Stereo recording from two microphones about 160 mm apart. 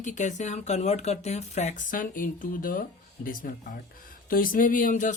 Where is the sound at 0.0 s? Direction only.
50° left (ahead or behind).